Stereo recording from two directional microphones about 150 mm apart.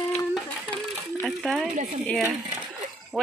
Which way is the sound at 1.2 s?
Centre (ahead or behind).